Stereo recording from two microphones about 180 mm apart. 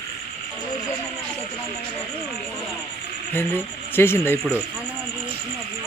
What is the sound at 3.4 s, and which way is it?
Speech, 10° left (ahead or behind).